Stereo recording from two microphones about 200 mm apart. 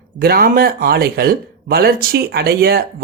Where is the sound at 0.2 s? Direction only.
50° right (ahead or behind).